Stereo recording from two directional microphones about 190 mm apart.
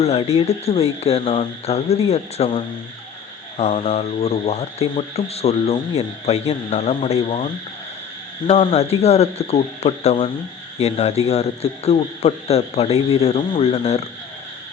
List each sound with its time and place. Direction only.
0.0 s speech: 35° left (ahead or behind)